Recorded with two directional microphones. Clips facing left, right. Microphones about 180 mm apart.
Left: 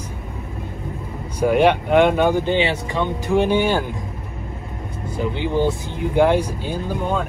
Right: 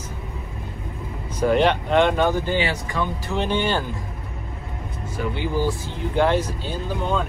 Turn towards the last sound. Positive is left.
turn(degrees=10)  # may be behind; listen again after turning